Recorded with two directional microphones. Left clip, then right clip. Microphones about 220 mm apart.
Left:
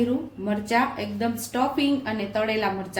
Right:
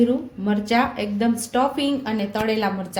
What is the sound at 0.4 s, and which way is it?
Speech, 30° right (ahead or behind).